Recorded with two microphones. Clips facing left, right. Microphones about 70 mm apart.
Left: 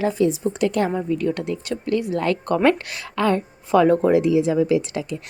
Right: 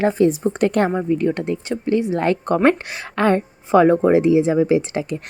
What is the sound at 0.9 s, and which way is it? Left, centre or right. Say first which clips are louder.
A woman's voice: right 3 dB; right.